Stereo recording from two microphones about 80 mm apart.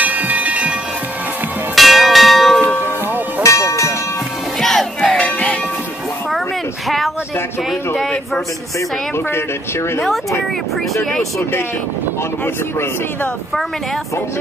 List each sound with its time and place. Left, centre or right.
0.0 s train: centre
1.8 s church bell: centre
3.4 s music: left
4.6 s music: centre
5.0 s music: centre
9.9 s speech: centre